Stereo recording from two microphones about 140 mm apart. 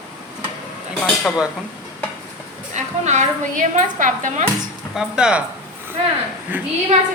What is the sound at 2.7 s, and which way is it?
Speech, 55° right (ahead or behind).